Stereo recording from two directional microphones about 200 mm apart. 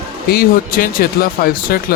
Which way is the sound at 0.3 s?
50° left (ahead or behind).